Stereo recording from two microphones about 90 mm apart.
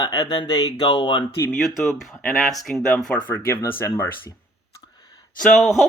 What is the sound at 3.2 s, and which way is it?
Speech, 25° left (ahead or behind).